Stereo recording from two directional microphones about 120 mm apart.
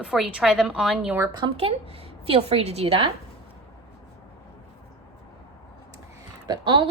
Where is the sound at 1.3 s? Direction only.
45° right (ahead or behind).